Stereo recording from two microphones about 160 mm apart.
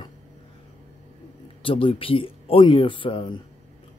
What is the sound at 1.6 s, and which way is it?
Speech, 35° left (ahead or behind).